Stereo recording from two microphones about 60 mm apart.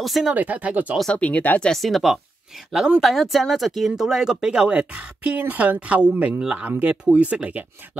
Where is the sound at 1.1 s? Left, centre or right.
Left.